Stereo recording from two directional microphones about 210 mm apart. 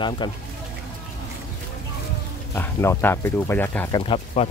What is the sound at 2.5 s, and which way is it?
Speech, 10° left (ahead or behind).